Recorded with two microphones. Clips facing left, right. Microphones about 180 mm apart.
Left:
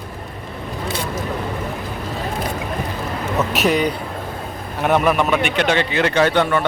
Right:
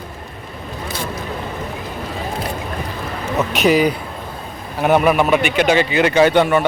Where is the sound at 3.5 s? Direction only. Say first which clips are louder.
Right 5 dB; centre (ahead or behind).